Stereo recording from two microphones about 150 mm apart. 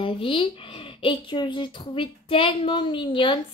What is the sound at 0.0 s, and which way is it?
A woman's voice, 35° left (ahead or behind).